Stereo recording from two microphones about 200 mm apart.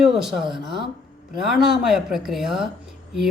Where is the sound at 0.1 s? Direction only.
Centre (ahead or behind).